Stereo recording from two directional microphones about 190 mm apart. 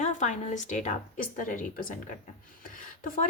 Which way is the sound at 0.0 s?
40° left (ahead or behind).